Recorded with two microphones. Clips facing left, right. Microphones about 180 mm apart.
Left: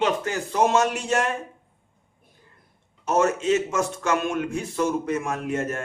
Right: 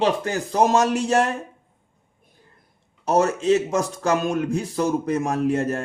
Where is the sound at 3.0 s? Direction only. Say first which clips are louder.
Right 2 dB; 35° right (ahead or behind).